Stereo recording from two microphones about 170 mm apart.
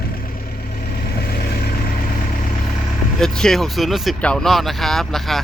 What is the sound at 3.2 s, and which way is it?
Speech, 5° left (ahead or behind).